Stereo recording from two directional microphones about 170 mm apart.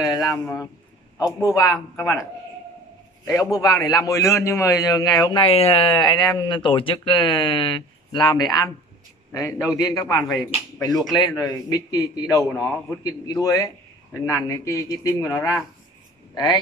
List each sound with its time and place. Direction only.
0.0 s a man's voice: 20° left (ahead or behind)
3.3 s a man's voice: 20° left (ahead or behind)
9.8 s a man's voice: 20° left (ahead or behind)